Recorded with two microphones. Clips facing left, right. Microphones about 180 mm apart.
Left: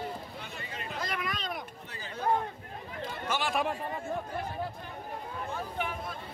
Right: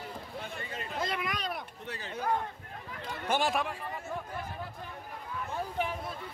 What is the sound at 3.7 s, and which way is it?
Speech, 45° left (ahead or behind).